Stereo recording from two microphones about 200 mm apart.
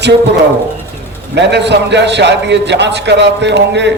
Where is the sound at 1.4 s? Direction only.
60° right (ahead or behind).